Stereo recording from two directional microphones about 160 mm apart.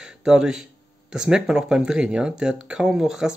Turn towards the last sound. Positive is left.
turn(degrees=-5)  # may be behind; listen again after turning